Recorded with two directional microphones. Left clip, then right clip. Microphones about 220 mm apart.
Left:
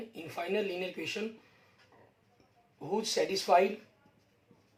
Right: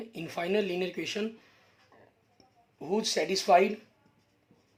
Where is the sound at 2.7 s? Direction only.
50° right (ahead or behind).